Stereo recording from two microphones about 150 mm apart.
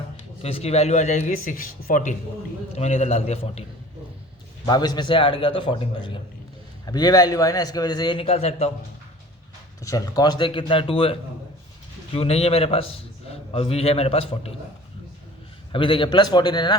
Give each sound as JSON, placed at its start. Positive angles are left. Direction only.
{"t": 0.4, "sound": "a man's voice", "side_deg": 45}
{"t": 2.7, "sound": "a man's voice", "side_deg": 45}
{"t": 4.6, "sound": "a man's voice", "side_deg": 25}
{"t": 9.8, "sound": "a man's voice", "side_deg": 25}
{"t": 15.7, "sound": "a man's voice", "side_deg": 35}